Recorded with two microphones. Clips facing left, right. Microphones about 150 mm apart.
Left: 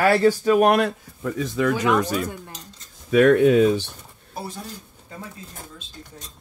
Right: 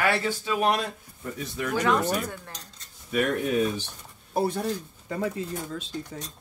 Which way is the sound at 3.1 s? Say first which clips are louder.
Left 10 dB; 90° left.